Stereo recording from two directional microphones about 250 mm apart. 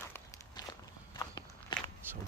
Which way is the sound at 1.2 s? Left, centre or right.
Centre.